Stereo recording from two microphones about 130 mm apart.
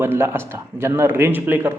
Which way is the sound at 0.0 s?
20° right (ahead or behind).